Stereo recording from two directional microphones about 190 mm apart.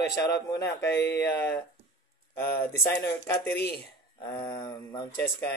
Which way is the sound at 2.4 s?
15° left (ahead or behind).